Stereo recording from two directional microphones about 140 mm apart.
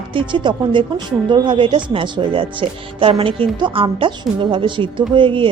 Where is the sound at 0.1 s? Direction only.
35° right (ahead or behind).